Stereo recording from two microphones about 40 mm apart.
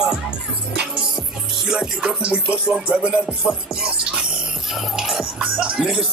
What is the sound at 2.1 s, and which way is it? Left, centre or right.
Speech, right.